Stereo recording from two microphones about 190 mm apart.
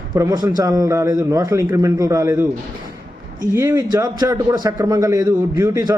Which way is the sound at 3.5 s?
15° right (ahead or behind).